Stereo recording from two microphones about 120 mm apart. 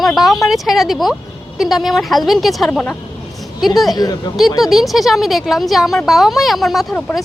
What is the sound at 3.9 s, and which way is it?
Speech, 35° left (ahead or behind).